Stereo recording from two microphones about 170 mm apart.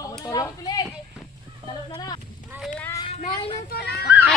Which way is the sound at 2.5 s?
10° right (ahead or behind).